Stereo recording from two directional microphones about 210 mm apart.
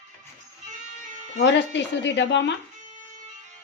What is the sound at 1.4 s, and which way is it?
Speech, 55° left (ahead or behind).